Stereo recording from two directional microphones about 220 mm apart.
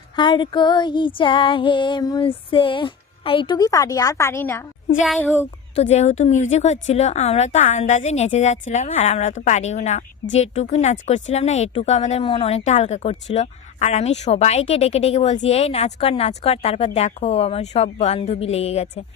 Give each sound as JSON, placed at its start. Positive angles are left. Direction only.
{"t": 0.2, "sound": "female singing", "side_deg": 20}
{"t": 5.0, "sound": "a child's voice", "side_deg": 0}
{"t": 5.7, "sound": "a woman's voice", "side_deg": 30}
{"t": 10.3, "sound": "female singing", "side_deg": 30}